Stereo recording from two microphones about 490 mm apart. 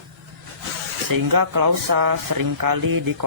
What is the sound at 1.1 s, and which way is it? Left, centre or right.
Speech, right.